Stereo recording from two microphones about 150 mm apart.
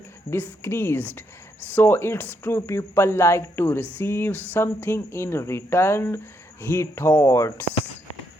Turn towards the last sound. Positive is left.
turn(degrees=20)  # may be behind; listen again after turning